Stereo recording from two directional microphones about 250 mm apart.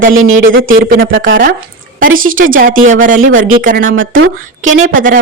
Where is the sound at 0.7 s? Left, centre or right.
Right.